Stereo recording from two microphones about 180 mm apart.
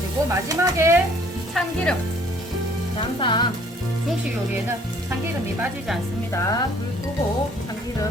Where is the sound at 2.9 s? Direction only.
25° left (ahead or behind).